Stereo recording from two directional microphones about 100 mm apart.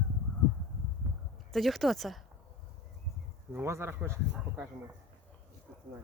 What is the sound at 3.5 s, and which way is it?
Speech, 25° right (ahead or behind).